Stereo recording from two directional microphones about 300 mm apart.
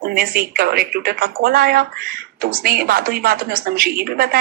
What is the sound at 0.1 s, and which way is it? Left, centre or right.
Speech, right.